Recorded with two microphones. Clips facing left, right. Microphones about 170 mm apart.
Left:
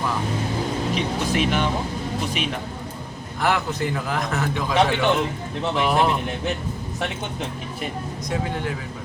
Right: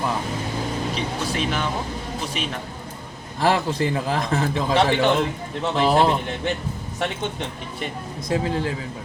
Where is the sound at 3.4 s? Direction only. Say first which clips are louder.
Right 3 dB; 30° right (ahead or behind).